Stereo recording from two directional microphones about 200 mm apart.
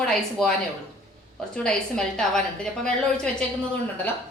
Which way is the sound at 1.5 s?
5° left (ahead or behind).